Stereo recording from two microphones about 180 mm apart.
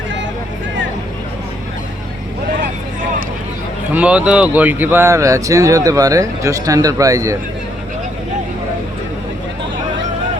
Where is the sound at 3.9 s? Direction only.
5° right (ahead or behind).